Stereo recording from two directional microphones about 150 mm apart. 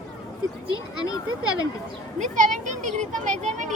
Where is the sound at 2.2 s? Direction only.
55° right (ahead or behind).